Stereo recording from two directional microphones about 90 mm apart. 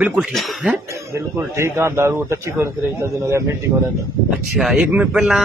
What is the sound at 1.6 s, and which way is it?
A man's voice, 30° right (ahead or behind).